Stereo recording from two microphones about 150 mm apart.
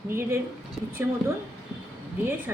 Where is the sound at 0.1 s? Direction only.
15° right (ahead or behind).